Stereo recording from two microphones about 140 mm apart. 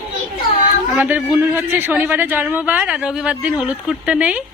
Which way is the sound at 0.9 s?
10° right (ahead or behind).